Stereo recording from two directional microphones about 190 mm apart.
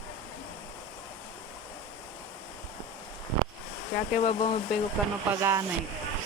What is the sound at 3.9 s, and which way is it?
Speech, 40° left (ahead or behind).